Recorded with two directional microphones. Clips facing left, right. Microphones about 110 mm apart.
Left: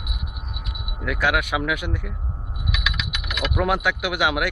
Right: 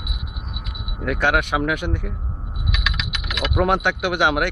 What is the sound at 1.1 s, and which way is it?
Speech, 35° right (ahead or behind).